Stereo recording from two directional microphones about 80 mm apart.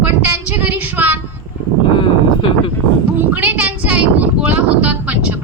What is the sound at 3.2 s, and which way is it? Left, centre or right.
Child singing, centre.